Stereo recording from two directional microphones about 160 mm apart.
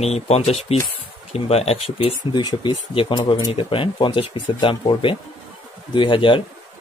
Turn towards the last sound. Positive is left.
turn(degrees=30)  # may be behind; listen again after turning